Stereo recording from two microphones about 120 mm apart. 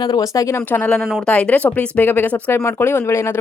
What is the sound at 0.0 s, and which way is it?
Speech, 30° left (ahead or behind).